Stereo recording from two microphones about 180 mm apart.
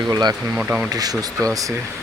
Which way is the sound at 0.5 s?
5° right (ahead or behind).